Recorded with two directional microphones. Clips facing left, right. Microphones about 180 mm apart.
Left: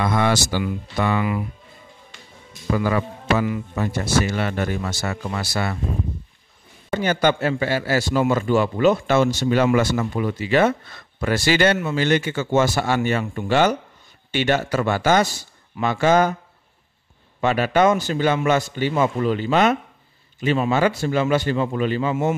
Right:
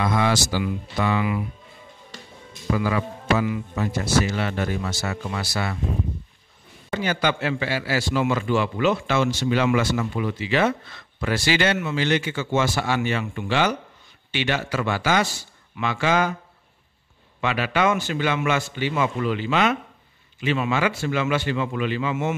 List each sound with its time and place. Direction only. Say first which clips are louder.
0.0 s a man's voice: left 2 dB; 50° left (ahead or behind)
2.7 s a man's voice: left 2 dB; 45° left (ahead or behind)
6.9 s a man's voice: left 4 dB; 45° left (ahead or behind)
17.4 s a man's voice: left 5 dB; 40° left (ahead or behind)